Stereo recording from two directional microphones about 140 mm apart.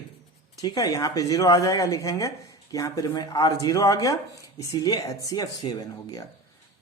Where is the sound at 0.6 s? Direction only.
30° left (ahead or behind).